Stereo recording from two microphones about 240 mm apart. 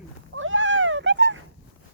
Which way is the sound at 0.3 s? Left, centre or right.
Right.